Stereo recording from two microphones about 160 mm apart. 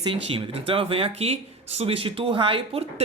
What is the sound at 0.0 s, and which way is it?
Speech, 35° right (ahead or behind).